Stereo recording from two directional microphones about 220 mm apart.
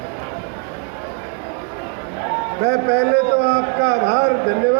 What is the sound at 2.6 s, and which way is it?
A man's voice, 50° right (ahead or behind).